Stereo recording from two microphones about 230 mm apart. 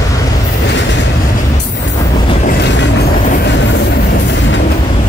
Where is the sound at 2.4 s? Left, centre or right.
Left.